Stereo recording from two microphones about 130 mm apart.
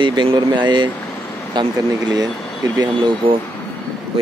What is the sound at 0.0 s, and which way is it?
Speech, 40° right (ahead or behind).